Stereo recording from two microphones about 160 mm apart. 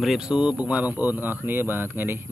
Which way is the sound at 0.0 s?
5° right (ahead or behind).